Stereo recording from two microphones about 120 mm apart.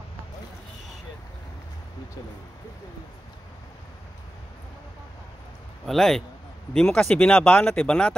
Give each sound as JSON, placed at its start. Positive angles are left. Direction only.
{"t": 5.9, "sound": "a man's voice", "side_deg": 0}